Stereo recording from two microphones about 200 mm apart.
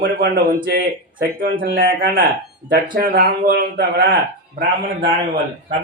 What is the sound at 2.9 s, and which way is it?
Speech, 50° right (ahead or behind).